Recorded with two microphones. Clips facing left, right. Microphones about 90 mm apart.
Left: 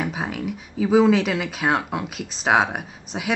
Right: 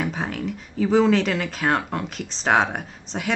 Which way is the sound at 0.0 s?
5° left (ahead or behind).